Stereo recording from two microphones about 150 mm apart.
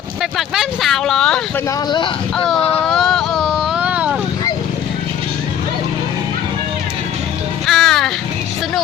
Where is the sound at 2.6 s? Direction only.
40° left (ahead or behind).